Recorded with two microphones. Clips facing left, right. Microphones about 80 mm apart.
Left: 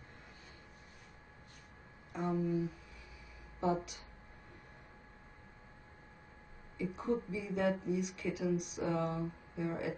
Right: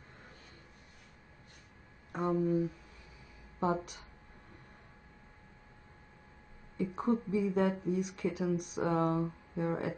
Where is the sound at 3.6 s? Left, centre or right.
Right.